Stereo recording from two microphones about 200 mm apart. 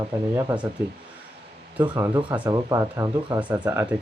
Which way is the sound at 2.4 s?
20° right (ahead or behind).